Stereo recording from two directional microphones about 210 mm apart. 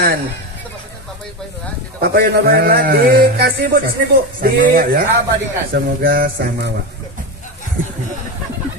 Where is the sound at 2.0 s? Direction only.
50° right (ahead or behind).